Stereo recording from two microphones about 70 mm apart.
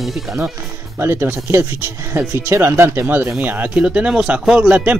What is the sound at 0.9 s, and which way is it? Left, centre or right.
Speech, right.